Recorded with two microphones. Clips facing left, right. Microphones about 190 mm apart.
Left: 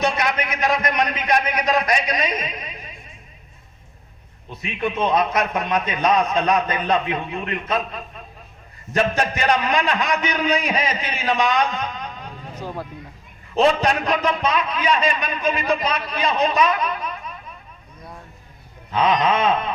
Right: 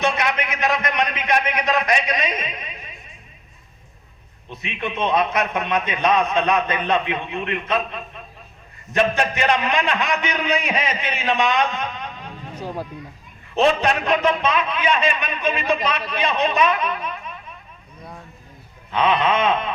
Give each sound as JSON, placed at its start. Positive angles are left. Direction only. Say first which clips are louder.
{"t": 0.0, "sound": "a man's voice", "louder": "even", "side_deg": 35}
{"t": 4.6, "sound": "a man's voice", "louder": "left 2 dB", "side_deg": 35}
{"t": 8.9, "sound": "a man's voice", "louder": "right 1 dB", "side_deg": 35}
{"t": 12.5, "sound": "speech", "louder": "right 1 dB", "side_deg": -15}
{"t": 13.6, "sound": "a man's voice", "louder": "even", "side_deg": 35}
{"t": 18.9, "sound": "a man's voice", "louder": "even", "side_deg": 35}